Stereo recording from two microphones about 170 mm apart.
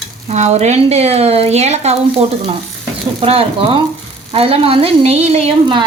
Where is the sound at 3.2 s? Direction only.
35° right (ahead or behind).